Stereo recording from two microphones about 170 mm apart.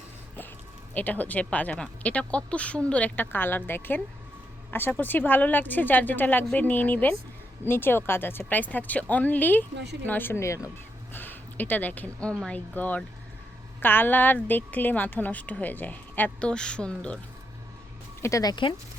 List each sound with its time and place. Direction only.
0.9 s speech: 10° left (ahead or behind)
9.7 s speech: 80° right
10.1 s speech: 10° left (ahead or behind)
18.2 s speech: 20° left (ahead or behind)